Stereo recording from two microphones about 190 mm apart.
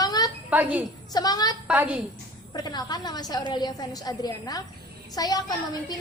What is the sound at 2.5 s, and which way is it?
A woman's voice, 20° left (ahead or behind).